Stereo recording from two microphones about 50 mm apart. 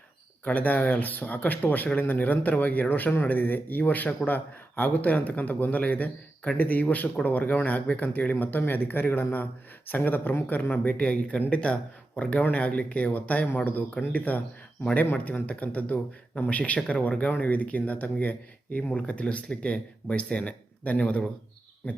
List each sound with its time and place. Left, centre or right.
0.4 s speech: left
18.8 s speech: left